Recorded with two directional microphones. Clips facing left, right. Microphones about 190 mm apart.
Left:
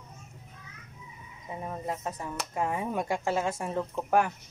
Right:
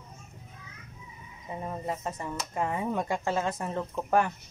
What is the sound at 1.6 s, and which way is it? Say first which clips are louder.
Speech: right 1 dB; centre (ahead or behind).